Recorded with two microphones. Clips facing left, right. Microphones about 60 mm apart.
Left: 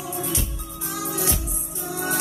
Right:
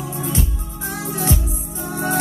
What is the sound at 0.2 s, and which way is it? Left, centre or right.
Music, right.